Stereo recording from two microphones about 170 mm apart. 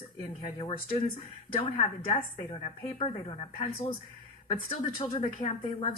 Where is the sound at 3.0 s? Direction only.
30° left (ahead or behind).